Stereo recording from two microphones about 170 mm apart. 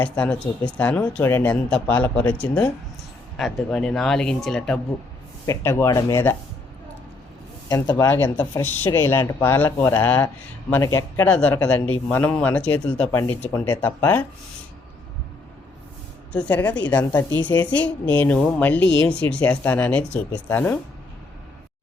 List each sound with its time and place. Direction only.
0.0 s speech: 10° left (ahead or behind)
5.5 s speech: 15° left (ahead or behind)
7.7 s speech: 20° left (ahead or behind)
16.3 s speech: 10° left (ahead or behind)